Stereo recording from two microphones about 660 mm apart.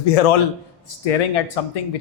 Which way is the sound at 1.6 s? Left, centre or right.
Left.